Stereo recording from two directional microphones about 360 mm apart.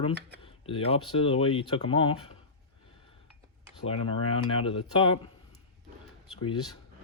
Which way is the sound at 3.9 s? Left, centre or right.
Left.